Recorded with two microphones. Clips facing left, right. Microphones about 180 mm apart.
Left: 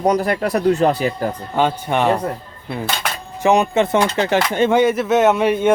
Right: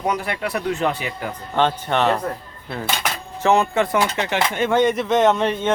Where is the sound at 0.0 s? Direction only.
40° left (ahead or behind).